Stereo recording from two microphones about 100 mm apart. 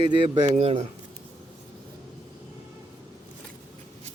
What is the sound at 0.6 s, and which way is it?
Speech, 75° right (ahead or behind).